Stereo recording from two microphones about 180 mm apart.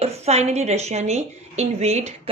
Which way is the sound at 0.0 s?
35° right (ahead or behind).